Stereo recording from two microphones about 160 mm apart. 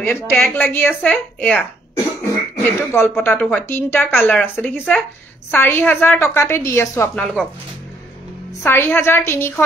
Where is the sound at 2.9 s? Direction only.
5° left (ahead or behind).